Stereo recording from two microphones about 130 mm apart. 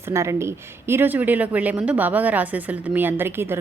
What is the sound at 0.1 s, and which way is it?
Speech, 20° right (ahead or behind).